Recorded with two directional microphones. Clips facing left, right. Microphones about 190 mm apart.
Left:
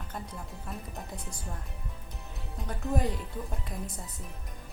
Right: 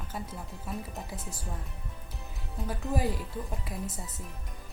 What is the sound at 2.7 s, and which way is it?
Speech, 5° right (ahead or behind).